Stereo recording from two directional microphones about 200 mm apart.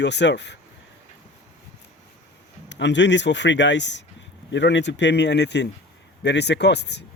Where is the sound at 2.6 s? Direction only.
65° left (ahead or behind).